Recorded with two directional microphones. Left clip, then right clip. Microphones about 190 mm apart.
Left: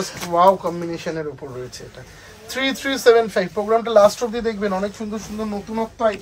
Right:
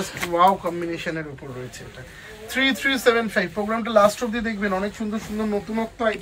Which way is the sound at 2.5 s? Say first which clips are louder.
Right 1 dB; 45° left (ahead or behind).